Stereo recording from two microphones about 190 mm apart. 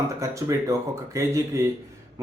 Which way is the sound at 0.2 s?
15° right (ahead or behind).